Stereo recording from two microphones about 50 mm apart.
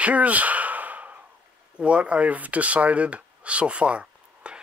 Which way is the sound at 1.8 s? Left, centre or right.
Right.